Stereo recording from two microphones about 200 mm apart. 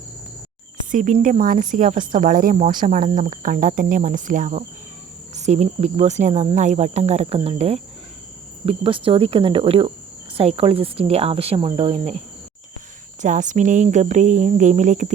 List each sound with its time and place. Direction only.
0.9 s speech: 40° right (ahead or behind); by 12.1 s 25° right (ahead or behind)
13.2 s speech: 40° right (ahead or behind)